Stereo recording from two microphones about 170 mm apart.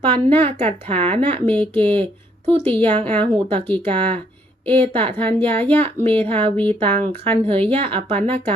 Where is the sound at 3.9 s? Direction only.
30° right (ahead or behind).